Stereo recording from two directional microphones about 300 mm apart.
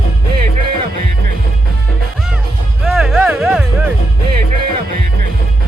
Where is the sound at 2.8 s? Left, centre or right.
Centre.